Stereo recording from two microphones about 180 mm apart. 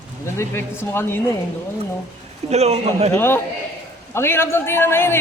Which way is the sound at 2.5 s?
35° right (ahead or behind).